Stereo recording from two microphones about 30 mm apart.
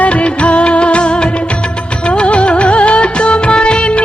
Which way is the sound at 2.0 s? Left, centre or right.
Left.